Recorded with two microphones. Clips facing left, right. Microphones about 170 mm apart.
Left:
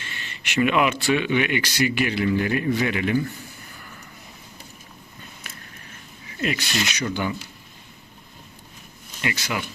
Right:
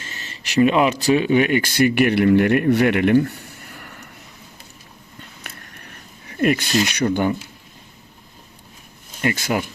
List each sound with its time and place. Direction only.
0.0 s speech: 40° right (ahead or behind); by 4.1 s 70° right (ahead or behind)
6.3 s speech: 50° right (ahead or behind)
9.2 s speech: 50° right (ahead or behind)